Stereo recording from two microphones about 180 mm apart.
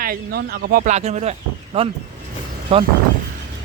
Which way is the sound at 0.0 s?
55° right (ahead or behind).